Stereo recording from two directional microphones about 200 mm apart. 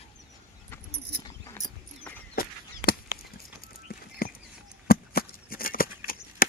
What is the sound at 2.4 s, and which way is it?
Honk, 50° left (ahead or behind).